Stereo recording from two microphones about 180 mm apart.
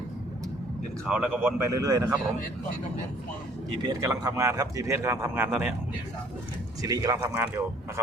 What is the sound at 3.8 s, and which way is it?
Speech, 20° right (ahead or behind).